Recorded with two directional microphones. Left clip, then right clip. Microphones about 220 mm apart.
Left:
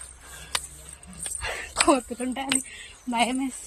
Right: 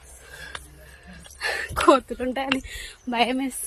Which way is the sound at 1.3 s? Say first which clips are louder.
Right 6 dB; 15° right (ahead or behind).